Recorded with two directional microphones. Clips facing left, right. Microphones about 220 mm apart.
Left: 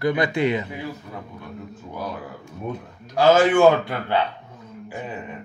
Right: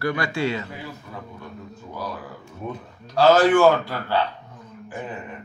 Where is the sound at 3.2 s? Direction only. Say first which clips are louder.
Even; 10° left (ahead or behind).